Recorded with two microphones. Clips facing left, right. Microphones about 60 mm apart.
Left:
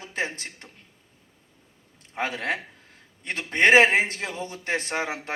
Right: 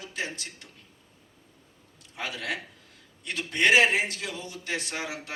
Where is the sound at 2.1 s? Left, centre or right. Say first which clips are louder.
Left 5 dB; left.